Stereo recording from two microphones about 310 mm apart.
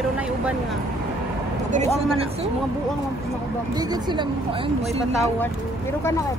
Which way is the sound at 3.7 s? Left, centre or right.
Centre.